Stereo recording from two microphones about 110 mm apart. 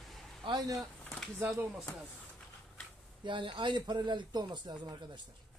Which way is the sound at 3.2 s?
45° right (ahead or behind).